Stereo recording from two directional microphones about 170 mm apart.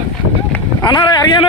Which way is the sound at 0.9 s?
25° left (ahead or behind).